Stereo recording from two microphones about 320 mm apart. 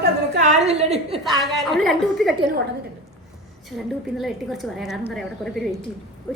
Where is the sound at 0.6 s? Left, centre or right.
Centre.